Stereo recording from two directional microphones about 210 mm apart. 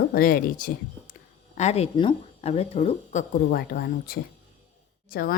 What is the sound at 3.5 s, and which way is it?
A woman's voice, 50° left (ahead or behind).